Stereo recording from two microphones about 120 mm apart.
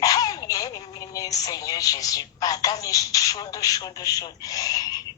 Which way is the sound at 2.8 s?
30° left (ahead or behind).